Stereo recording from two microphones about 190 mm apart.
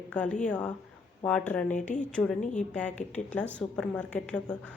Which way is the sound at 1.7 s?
40° left (ahead or behind).